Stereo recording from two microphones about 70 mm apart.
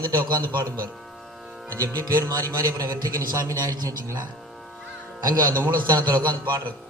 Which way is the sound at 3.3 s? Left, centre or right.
Right.